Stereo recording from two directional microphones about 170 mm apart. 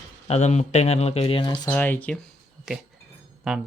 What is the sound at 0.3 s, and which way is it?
Speech, 40° left (ahead or behind).